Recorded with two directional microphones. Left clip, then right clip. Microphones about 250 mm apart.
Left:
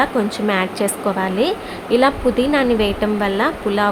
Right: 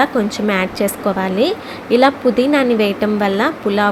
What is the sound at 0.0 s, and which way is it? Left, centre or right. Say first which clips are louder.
A woman's voice: right 2 dB; centre.